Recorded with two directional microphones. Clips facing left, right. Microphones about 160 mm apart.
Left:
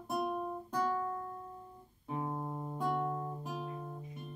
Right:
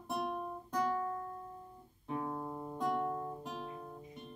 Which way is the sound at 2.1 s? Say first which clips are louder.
Left 1 dB; 20° left (ahead or behind).